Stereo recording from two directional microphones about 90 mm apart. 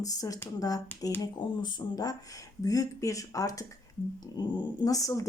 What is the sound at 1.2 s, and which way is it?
Speech, 55° left (ahead or behind).